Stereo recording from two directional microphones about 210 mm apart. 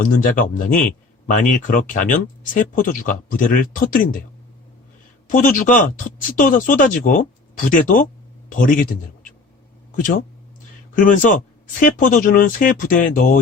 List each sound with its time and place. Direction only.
0.0 s speech: 40° left (ahead or behind)
5.3 s speech: 40° left (ahead or behind)